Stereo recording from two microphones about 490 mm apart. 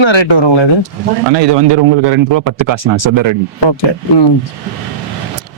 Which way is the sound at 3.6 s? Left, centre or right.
Left.